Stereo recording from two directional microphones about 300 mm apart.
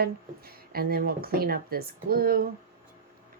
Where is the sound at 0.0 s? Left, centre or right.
Right.